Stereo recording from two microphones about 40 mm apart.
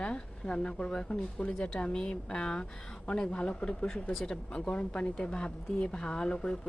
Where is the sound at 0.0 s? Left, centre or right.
Left.